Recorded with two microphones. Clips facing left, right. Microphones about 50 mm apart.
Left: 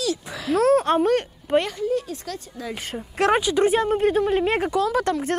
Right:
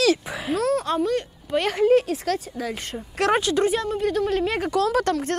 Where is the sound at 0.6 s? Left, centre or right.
Left.